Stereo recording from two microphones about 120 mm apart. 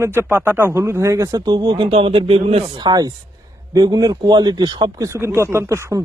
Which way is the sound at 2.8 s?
35° right (ahead or behind).